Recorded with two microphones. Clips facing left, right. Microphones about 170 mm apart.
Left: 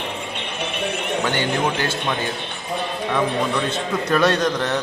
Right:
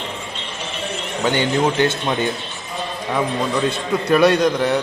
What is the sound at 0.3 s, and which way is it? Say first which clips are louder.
Music: left 3 dB; 60° left (ahead or behind).